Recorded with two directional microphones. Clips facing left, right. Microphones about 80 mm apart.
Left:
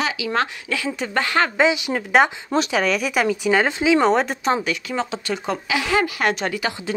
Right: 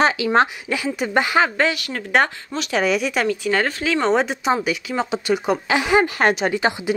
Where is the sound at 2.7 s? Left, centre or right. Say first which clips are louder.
Right 1 dB; centre.